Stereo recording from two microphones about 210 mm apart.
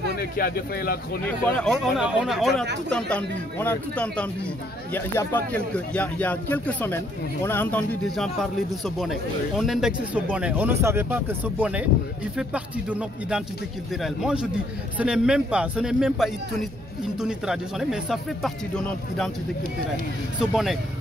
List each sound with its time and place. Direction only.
0.2 s speech: 45° left (ahead or behind)
1.2 s speech: centre (ahead or behind)